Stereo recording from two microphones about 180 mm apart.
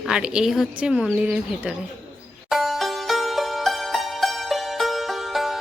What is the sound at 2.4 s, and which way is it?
Music, centre (ahead or behind).